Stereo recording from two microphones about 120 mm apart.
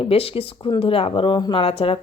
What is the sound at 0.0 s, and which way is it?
Speech, 55° left (ahead or behind).